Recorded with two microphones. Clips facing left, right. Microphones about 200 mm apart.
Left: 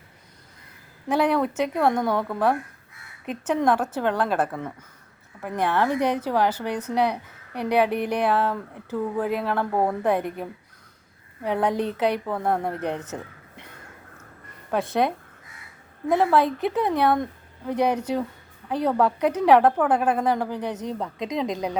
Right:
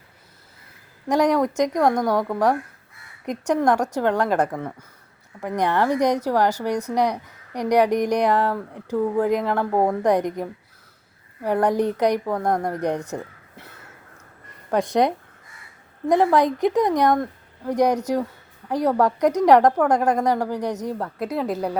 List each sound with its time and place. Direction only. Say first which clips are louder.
1.1 s a woman's voice: right 3 dB; 10° right (ahead or behind)